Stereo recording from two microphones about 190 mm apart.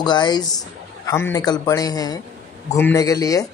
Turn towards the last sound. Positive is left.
turn(degrees=20)  # may be behind; listen again after turning